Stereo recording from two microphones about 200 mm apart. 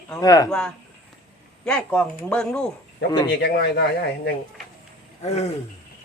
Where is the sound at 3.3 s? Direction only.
55° left (ahead or behind).